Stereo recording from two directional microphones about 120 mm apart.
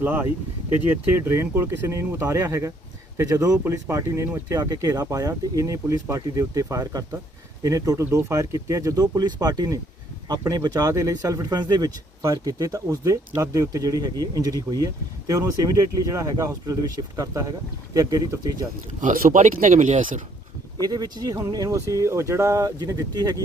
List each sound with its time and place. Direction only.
0.0 s speech: 15° right (ahead or behind)
19.0 s speech: 90° right
20.8 s speech: 30° right (ahead or behind)